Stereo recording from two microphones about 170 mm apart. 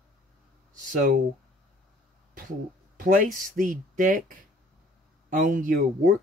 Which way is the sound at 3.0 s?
55° right (ahead or behind).